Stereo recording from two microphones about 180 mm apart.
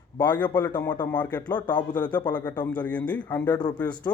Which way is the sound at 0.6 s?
10° left (ahead or behind).